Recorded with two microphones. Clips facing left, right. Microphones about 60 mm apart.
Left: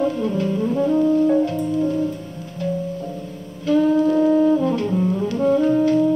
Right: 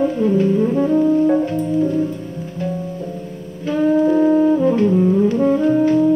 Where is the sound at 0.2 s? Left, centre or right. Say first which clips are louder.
Right 6 dB; right.